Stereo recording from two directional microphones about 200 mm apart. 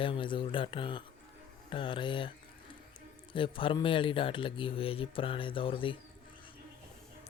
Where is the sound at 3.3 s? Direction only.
25° left (ahead or behind).